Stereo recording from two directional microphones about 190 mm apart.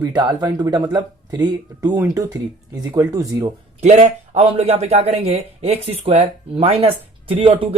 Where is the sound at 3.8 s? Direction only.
35° right (ahead or behind).